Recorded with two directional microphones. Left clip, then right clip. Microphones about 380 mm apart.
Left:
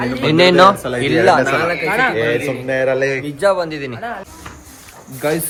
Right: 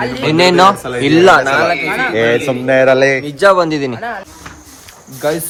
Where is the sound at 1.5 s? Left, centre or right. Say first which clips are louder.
Right 4 dB; centre.